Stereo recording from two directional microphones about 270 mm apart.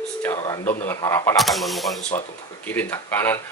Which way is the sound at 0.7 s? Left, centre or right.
Centre.